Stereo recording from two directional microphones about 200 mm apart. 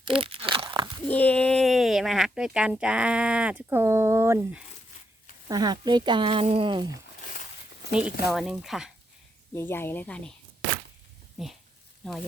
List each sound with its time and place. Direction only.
0.0 s crunch: 25° right (ahead or behind)
1.0 s speech: 5° left (ahead or behind); by 6.9 s 25° right (ahead or behind)
8.3 s speech: centre (ahead or behind)
9.6 s speech: 10° left (ahead or behind)
11.4 s speech: centre (ahead or behind)